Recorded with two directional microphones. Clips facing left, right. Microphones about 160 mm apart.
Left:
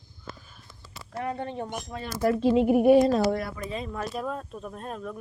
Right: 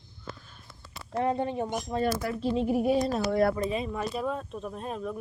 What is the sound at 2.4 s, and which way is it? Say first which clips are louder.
Speech: left 6 dB; 80° left.